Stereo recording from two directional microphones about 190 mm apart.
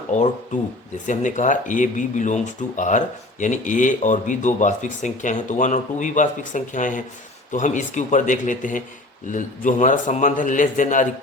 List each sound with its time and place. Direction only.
0.1 s speech: 40° left (ahead or behind)